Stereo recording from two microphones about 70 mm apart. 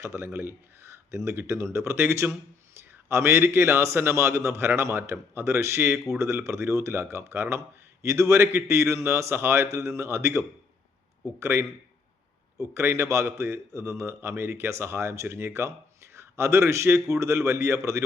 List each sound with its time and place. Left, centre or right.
0.0 s speech: right
12.7 s speech: right